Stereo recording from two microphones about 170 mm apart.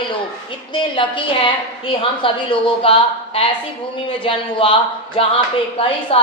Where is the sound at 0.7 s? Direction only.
30° left (ahead or behind).